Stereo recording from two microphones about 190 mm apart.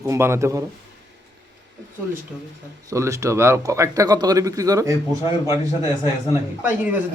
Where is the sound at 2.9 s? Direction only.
15° right (ahead or behind).